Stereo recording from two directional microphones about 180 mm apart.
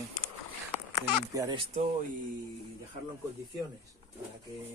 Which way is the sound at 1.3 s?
20° right (ahead or behind).